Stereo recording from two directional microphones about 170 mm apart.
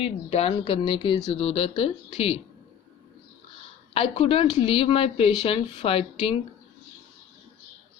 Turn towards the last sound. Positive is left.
turn(degrees=35)  # may be behind; listen again after turning